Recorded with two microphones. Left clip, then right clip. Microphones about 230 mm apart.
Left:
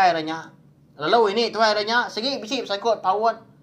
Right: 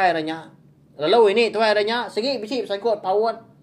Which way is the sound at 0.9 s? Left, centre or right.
Left.